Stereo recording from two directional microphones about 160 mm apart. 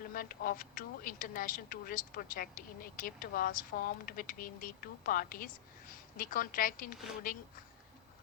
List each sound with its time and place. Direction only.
0.1 s speech: 65° left (ahead or behind)